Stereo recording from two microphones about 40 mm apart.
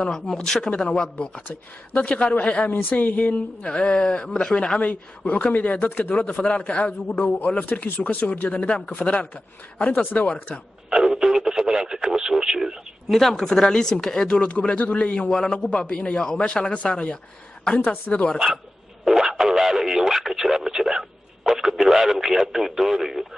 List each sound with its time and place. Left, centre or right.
0.1 s a man's voice: centre; by 2.7 s left
2.8 s speech: left
3.3 s speech: left
4.7 s a man's voice: left
5.9 s speech: left
6.1 s a man's voice: left
10.9 s radio: centre
13.1 s speech: centre
13.4 s speech: centre
14.2 s a man's voice: left
18.1 s speech: left
19.0 s radio: centre